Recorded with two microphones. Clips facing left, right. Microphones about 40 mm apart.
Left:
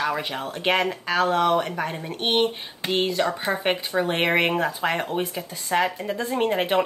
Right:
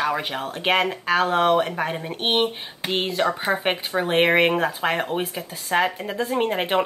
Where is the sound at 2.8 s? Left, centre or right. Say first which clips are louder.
Even; centre.